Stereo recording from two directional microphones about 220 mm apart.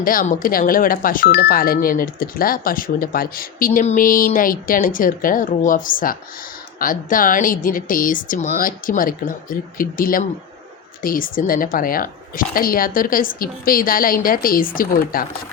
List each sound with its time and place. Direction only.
0.0 s speech: 40° left (ahead or behind)